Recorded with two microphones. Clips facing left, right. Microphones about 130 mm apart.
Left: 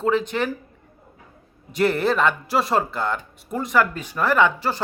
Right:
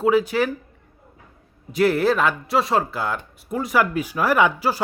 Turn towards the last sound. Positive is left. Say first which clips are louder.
# right 1 dB
turn(degrees=-10)  # may be behind; listen again after turning